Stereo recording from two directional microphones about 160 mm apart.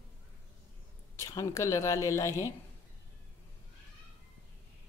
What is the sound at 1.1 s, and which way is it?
A woman's voice, 20° left (ahead or behind).